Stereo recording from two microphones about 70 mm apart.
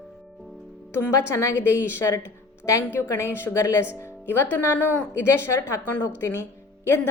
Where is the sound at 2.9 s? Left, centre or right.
Left.